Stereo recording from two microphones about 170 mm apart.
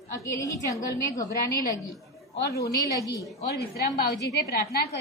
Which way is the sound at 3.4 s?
70° left (ahead or behind).